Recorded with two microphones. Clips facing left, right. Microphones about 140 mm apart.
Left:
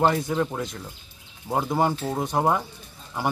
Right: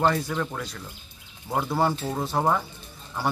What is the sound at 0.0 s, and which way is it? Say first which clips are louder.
Speech: left 2 dB; 20° left (ahead or behind).